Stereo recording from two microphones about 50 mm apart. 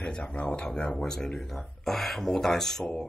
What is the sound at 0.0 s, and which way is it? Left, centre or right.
Speech, left.